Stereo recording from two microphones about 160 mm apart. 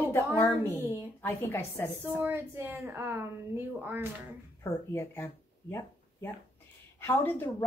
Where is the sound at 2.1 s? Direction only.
15° right (ahead or behind).